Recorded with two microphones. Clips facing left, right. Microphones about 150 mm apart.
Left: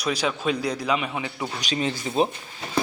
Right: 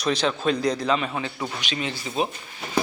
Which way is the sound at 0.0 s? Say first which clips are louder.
Right 2 dB; 10° left (ahead or behind).